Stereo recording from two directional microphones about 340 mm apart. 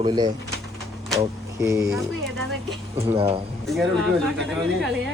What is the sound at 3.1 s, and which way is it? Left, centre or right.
Speech, centre.